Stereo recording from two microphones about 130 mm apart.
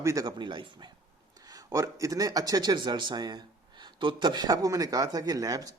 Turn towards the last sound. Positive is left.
turn(degrees=-30)  # may be behind; listen again after turning